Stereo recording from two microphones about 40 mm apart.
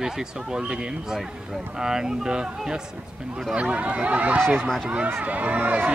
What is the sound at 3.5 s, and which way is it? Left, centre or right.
Speech, right.